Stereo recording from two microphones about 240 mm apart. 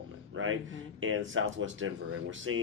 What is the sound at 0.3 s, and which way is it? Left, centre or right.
Speech, right.